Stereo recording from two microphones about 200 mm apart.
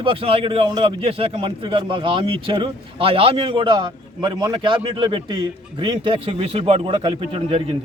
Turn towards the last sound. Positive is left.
turn(degrees=-30)  # may be behind; listen again after turning